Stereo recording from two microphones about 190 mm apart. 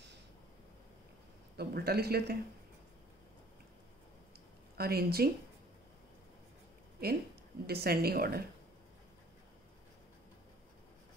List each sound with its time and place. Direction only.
1.6 s speech: 55° right (ahead or behind)
4.7 s speech: 55° right (ahead or behind)
7.0 s speech: 55° right (ahead or behind)